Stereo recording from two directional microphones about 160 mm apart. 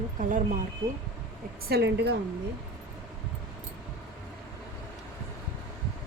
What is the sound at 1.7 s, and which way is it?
Speech, 90° right.